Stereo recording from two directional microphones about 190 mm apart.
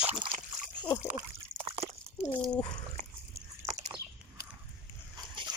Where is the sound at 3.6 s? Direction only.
20° right (ahead or behind).